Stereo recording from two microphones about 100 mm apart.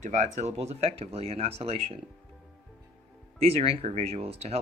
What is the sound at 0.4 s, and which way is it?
Speech, 90° right.